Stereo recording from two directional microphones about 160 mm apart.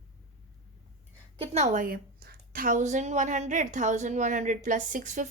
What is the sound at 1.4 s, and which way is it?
A woman's voice, 45° right (ahead or behind).